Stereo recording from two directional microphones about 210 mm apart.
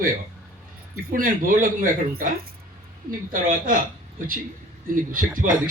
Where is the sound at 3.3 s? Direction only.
40° right (ahead or behind).